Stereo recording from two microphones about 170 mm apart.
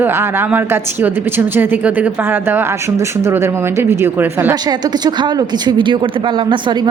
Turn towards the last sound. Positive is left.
turn(degrees=-30)  # may be behind; listen again after turning